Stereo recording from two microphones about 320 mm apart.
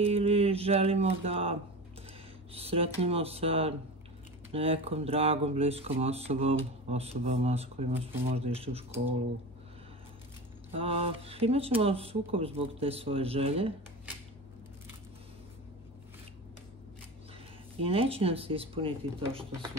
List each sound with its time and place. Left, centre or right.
0.0 s speech: centre
10.8 s speech: centre
17.7 s speech: centre